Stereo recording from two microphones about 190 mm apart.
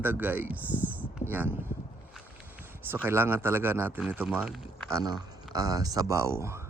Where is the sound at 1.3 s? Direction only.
10° right (ahead or behind).